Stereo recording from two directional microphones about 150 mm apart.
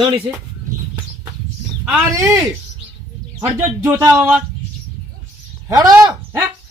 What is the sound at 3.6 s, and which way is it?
Speech, 20° right (ahead or behind).